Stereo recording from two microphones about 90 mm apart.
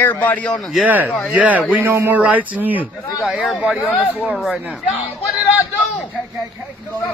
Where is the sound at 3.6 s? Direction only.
10° right (ahead or behind).